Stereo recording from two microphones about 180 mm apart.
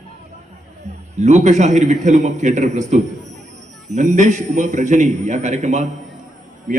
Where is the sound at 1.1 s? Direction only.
40° right (ahead or behind).